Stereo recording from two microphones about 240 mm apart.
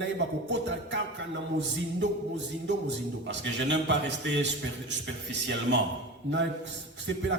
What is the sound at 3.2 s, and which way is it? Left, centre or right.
A man's voice, right.